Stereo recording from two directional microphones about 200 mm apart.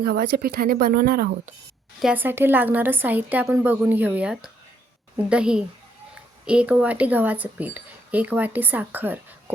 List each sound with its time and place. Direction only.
0.0 s speech: 50° right (ahead or behind)
2.0 s a woman's voice: 5° right (ahead or behind)